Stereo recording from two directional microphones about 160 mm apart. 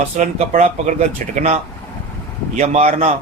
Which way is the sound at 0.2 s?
50° right (ahead or behind).